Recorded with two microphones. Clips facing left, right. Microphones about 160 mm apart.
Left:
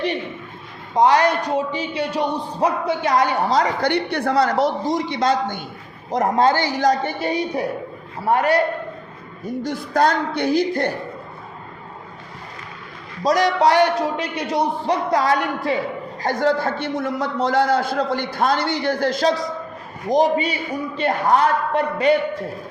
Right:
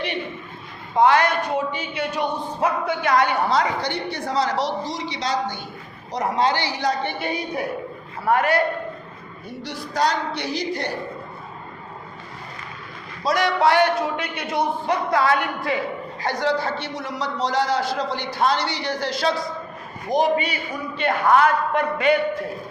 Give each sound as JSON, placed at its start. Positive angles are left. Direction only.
{"t": 0.9, "sound": "a man's voice", "side_deg": 35}
{"t": 3.8, "sound": "a man's voice", "side_deg": 65}
{"t": 9.4, "sound": "a man's voice", "side_deg": 45}
{"t": 13.2, "sound": "a man's voice", "side_deg": 40}
{"t": 16.2, "sound": "a man's voice", "side_deg": 50}